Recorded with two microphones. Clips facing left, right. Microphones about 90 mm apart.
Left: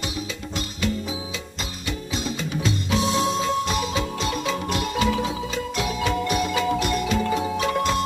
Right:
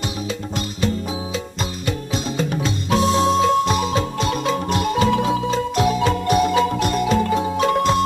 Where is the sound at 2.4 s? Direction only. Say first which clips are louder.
Right 4 dB; 45° right (ahead or behind).